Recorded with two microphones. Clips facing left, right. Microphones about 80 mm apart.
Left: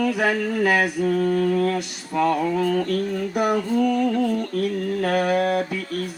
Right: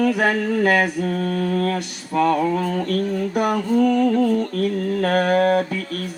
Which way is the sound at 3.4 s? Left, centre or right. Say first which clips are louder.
Right 2 dB; right.